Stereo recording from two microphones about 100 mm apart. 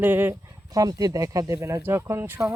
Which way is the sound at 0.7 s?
40° right (ahead or behind).